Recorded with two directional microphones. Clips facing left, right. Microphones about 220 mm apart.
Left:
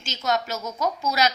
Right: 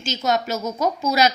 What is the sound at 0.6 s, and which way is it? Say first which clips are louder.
Speech: right 4 dB; 30° right (ahead or behind).